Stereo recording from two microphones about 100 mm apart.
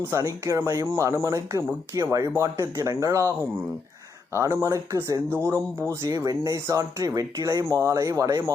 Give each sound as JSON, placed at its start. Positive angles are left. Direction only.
{"t": 0.1, "sound": "speech", "side_deg": -35}